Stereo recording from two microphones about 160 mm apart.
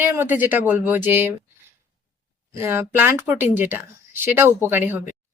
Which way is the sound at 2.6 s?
15° right (ahead or behind).